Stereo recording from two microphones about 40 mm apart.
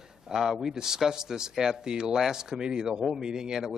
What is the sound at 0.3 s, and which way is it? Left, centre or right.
A man's voice, centre.